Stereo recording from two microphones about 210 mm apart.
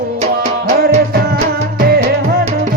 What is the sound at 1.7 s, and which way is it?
Music, 45° right (ahead or behind).